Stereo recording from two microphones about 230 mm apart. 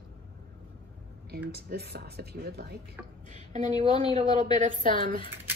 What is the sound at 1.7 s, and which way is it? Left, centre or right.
A woman's voice, right.